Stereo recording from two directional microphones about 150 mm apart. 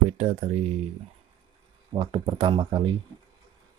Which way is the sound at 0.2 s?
50° right (ahead or behind).